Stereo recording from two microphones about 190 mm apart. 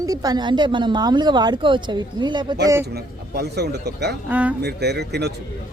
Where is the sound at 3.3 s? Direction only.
60° right (ahead or behind).